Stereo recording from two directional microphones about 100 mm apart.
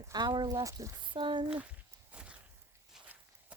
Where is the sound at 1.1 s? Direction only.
55° right (ahead or behind).